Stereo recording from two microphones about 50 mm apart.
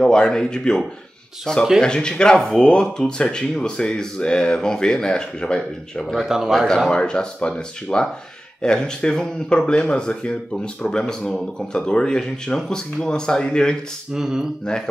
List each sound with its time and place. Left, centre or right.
0.0 s speech: centre
6.1 s speech: centre
6.9 s speech: centre
14.1 s speech: centre